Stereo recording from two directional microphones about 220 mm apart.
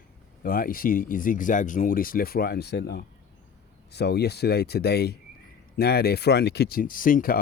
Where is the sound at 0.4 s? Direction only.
40° left (ahead or behind).